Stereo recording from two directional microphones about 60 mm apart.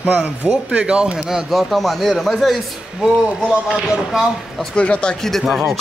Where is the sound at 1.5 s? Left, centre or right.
Centre.